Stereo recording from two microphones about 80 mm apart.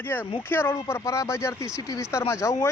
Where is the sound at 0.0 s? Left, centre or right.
Left.